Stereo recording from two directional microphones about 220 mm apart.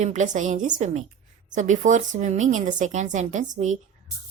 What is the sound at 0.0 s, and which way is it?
Speech, 35° right (ahead or behind).